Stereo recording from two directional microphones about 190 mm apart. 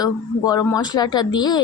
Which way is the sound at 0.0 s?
20° left (ahead or behind).